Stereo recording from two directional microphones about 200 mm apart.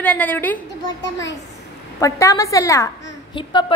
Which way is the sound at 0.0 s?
5° left (ahead or behind).